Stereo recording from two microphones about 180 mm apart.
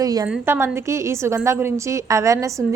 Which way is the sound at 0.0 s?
20° right (ahead or behind).